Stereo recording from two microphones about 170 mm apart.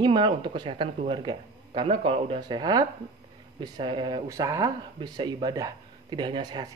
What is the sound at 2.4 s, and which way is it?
Speech, 25° right (ahead or behind).